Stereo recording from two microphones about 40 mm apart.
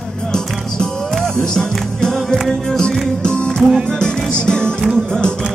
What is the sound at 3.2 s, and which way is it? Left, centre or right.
Music, left.